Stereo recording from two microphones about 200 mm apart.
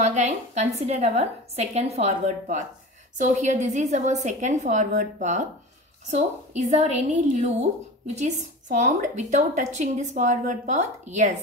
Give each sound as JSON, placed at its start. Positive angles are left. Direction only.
{"t": 0.0, "sound": "a woman's voice", "side_deg": -35}